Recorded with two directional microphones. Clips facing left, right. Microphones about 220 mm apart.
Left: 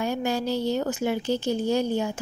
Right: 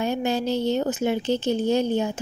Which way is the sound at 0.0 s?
20° right (ahead or behind).